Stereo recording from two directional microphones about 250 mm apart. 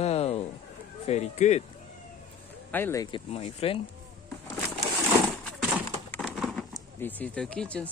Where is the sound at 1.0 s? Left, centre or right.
Left.